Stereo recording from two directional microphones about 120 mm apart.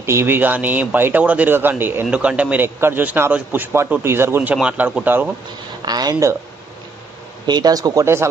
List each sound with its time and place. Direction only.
0.0 s a man's voice: 20° right (ahead or behind)
5.9 s speech: 35° right (ahead or behind)
7.4 s speech: 35° right (ahead or behind)